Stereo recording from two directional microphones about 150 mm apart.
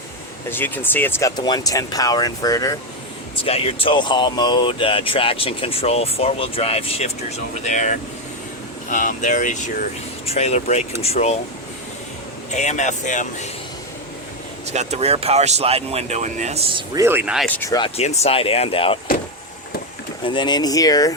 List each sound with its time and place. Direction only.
0.5 s speech: 15° left (ahead or behind)
1.4 s speech: 25° left (ahead or behind)
3.3 s speech: 40° left (ahead or behind)
12.5 s speech: 50° left (ahead or behind)
14.7 s speech: 50° right (ahead or behind)
16.9 s speech: 15° right (ahead or behind)
17.7 s speech: 30° left (ahead or behind)
17.9 s speech: 45° left (ahead or behind)
20.2 s speech: 30° left (ahead or behind)